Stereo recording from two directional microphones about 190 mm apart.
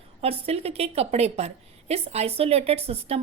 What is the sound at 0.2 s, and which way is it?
A woman's voice, 30° right (ahead or behind).